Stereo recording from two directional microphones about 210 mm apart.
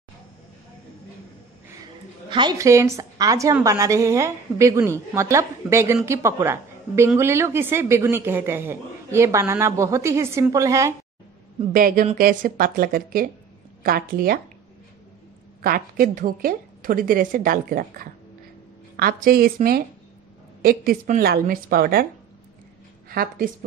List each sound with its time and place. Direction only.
2.2 s a woman's voice: 20° right (ahead or behind)
11.7 s a woman's voice: 40° right (ahead or behind)
15.6 s a woman's voice: 45° right (ahead or behind)
23.0 s a woman's voice: 45° right (ahead or behind)